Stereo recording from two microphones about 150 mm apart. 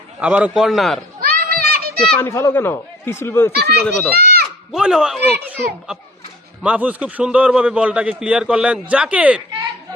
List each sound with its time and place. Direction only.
0.2 s a man's voice: 10° right (ahead or behind)
1.2 s children playing: 90° right
2.0 s speech: 10° left (ahead or behind)
3.5 s a child's voice: 90° right
3.8 s speech: 10° left (ahead or behind)
4.1 s a sound: 90° right
4.7 s a man's voice: 5° right (ahead or behind)